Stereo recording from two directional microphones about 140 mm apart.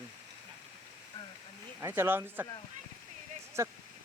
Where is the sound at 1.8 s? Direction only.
15° right (ahead or behind).